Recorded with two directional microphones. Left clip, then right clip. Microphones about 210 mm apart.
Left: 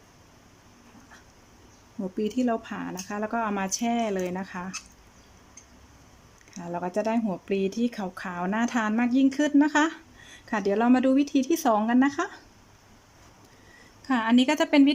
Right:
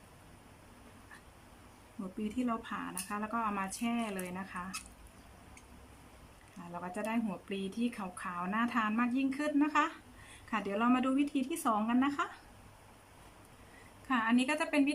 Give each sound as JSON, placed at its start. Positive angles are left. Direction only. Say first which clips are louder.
{"t": 2.1, "sound": "speech", "louder": "left 10 dB", "side_deg": 30}
{"t": 6.7, "sound": "speech", "louder": "left 10 dB", "side_deg": 30}
{"t": 14.1, "sound": "speech", "louder": "left 8 dB", "side_deg": 30}